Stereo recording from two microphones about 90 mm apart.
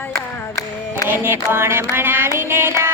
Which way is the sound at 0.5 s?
35° left (ahead or behind).